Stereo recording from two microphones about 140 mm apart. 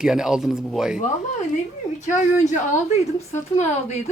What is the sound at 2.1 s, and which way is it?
A woman's voice, 60° left (ahead or behind).